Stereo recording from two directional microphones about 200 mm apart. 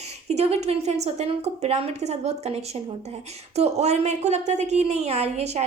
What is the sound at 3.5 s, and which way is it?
A woman's voice, 35° right (ahead or behind).